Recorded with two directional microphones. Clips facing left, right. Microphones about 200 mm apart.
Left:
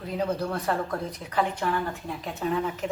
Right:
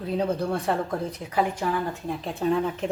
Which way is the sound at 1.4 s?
15° right (ahead or behind).